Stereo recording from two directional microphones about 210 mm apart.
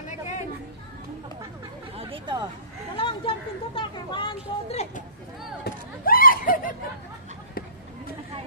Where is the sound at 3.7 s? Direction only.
20° left (ahead or behind).